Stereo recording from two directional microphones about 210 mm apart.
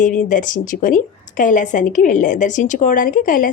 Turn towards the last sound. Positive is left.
turn(degrees=40)  # may be behind; listen again after turning